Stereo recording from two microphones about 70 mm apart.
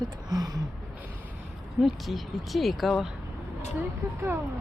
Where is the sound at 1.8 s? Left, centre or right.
Centre.